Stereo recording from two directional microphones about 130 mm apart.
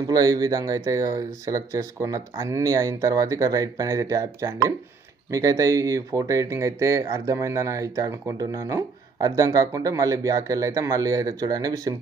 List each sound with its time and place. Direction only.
0.0 s speech: 30° right (ahead or behind)